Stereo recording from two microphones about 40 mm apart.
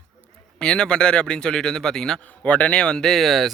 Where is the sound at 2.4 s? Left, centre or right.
Left.